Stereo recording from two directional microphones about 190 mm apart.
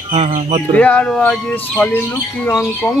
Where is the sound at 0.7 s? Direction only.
5° left (ahead or behind).